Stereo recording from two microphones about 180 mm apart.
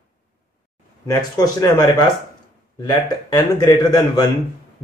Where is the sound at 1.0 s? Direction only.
20° left (ahead or behind).